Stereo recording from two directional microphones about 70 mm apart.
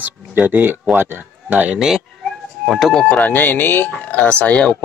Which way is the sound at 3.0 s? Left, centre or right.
Left.